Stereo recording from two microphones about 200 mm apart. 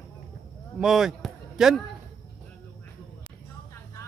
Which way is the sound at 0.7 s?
Centre (ahead or behind).